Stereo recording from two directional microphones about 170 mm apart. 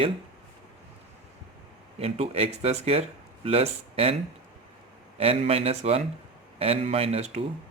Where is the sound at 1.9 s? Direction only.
35° right (ahead or behind).